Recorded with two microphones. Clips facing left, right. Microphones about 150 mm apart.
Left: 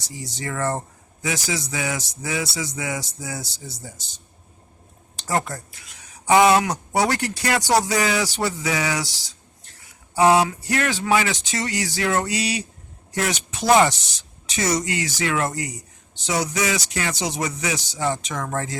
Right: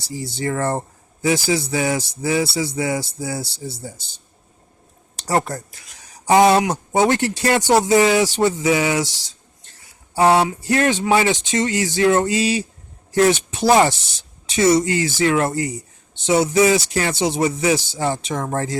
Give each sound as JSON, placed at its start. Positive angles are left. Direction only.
{"t": 0.1, "sound": "speech", "side_deg": -30}
{"t": 5.2, "sound": "speech", "side_deg": -40}
{"t": 10.2, "sound": "speech", "side_deg": -30}